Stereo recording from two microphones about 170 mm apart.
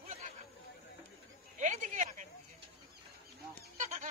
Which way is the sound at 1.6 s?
45° right (ahead or behind).